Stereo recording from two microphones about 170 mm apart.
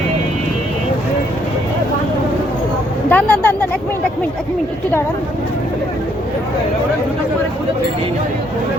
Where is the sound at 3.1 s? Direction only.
5° left (ahead or behind).